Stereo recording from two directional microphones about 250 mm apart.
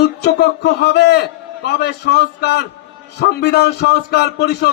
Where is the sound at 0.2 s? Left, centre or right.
Left.